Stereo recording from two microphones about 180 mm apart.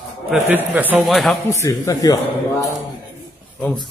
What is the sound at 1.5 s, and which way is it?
Speech, 15° left (ahead or behind).